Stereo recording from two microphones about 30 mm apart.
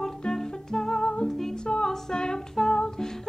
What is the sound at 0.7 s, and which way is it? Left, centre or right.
Music, centre.